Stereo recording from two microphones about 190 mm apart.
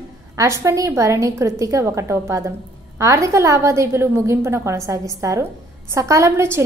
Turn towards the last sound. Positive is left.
turn(degrees=-15)  # may be behind; listen again after turning